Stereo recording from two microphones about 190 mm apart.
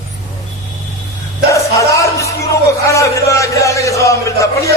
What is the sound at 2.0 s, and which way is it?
Music, 15° left (ahead or behind).